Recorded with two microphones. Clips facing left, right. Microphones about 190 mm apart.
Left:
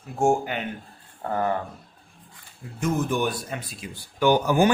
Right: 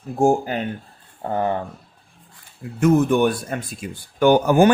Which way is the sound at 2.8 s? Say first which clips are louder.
Right 8 dB; 60° right (ahead or behind).